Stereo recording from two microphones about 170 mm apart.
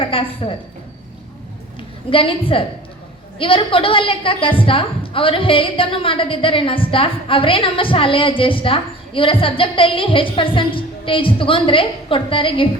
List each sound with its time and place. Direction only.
0.0 s a woman's voice: 30° left (ahead or behind)
2.0 s a woman's voice: 30° left (ahead or behind)